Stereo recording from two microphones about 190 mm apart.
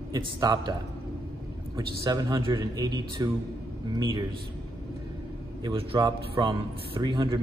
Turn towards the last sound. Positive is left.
turn(degrees=-25)  # may be behind; listen again after turning